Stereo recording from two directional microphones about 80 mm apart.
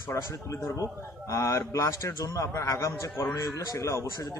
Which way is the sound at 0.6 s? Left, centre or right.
Left.